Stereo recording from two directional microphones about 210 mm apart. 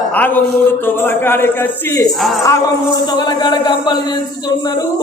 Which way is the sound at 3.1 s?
20° left (ahead or behind).